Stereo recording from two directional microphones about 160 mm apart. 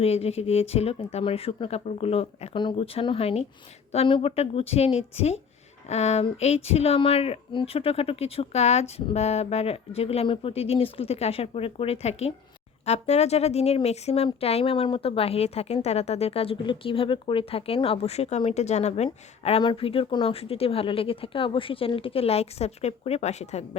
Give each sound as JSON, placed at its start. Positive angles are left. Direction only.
{"t": 0.0, "sound": "speech", "side_deg": 40}